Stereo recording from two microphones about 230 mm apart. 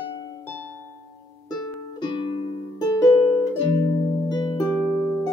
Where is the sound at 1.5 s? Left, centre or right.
Centre.